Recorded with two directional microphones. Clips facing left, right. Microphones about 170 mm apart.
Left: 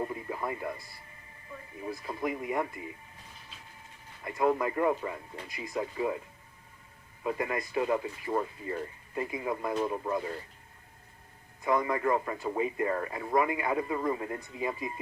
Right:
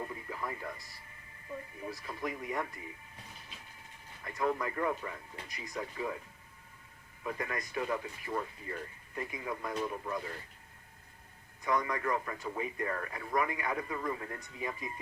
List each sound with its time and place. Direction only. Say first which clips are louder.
0.0 s music: left 6 dB; 30° left (ahead or behind)
1.9 s speech: left 6 dB; 25° left (ahead or behind)
4.2 s speech: left 6 dB; 25° left (ahead or behind)
7.3 s speech: left 6 dB; 25° left (ahead or behind)
9.7 s speech: left 5 dB; 40° left (ahead or behind)
11.6 s speech: left 5 dB; 25° left (ahead or behind)